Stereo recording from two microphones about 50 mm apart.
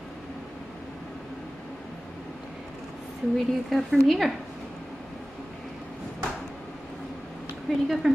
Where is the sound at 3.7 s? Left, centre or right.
Centre.